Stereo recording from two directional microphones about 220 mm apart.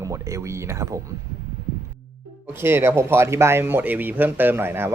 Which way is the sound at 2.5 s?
10° right (ahead or behind).